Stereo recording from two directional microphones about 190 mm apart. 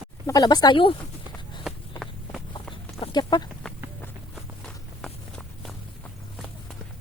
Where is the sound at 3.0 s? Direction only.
20° left (ahead or behind).